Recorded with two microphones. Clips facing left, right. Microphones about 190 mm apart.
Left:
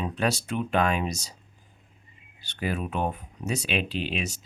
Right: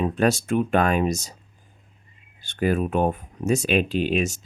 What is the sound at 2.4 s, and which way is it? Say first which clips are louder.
Speech: right 8 dB; 50° right (ahead or behind).